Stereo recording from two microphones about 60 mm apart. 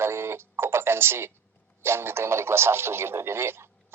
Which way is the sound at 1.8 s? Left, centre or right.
Right.